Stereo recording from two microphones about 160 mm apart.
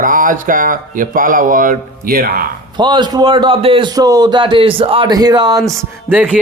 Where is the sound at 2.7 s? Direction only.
30° right (ahead or behind).